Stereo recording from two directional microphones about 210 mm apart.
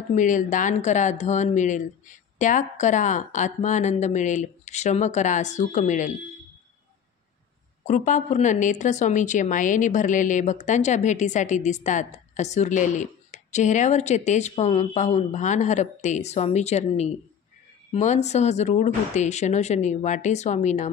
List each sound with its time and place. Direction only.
0.1 s a woman's voice: 40° left (ahead or behind)
7.8 s a woman's voice: 35° left (ahead or behind)